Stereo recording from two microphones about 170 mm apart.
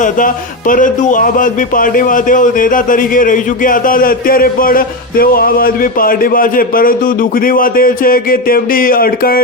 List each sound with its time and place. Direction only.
0.7 s a man's voice: 50° left (ahead or behind)